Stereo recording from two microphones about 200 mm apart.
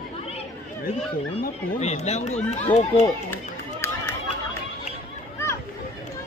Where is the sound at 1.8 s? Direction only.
35° left (ahead or behind).